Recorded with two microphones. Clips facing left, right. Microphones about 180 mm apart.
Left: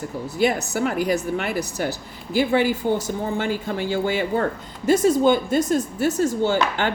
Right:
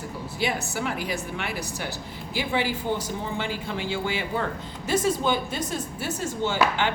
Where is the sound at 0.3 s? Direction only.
45° left (ahead or behind).